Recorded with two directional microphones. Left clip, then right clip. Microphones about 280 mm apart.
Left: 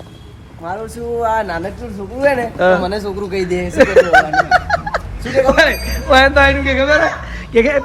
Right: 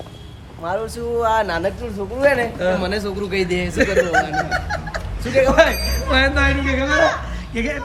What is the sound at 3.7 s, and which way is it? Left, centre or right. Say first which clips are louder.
Speech: left 8 dB; centre.